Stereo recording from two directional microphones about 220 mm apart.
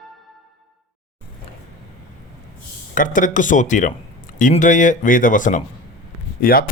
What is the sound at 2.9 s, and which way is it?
Speech, 35° left (ahead or behind).